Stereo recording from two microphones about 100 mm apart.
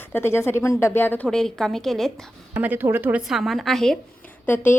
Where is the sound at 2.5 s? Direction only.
15° right (ahead or behind).